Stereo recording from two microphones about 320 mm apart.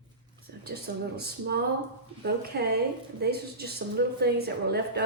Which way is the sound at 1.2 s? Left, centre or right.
Right.